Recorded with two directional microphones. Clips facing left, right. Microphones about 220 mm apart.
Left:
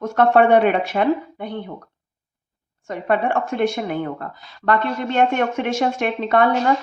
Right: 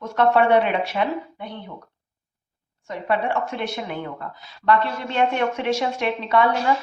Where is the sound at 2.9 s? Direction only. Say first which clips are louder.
Left 3 dB; 50° left (ahead or behind).